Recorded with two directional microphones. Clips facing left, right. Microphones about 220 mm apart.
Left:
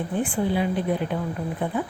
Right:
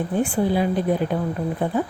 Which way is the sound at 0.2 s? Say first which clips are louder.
Right 3 dB; 40° right (ahead or behind).